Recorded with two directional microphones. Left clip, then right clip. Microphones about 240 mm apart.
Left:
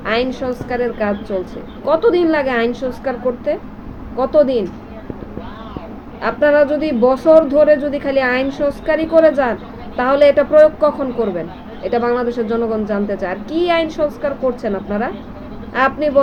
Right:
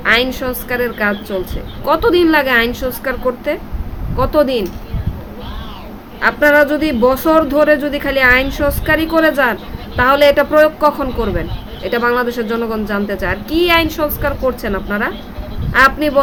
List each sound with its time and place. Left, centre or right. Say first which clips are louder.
0.0 s speech: right 4 dB; centre
6.2 s speech: right 2 dB; centre